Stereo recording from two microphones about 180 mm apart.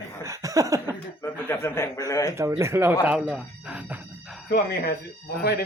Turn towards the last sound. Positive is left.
turn(degrees=60)  # may be behind; listen again after turning